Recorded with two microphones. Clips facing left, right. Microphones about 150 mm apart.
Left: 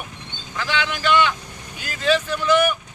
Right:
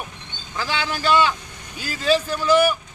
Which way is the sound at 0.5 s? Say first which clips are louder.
Left 1 dB; 35° right (ahead or behind).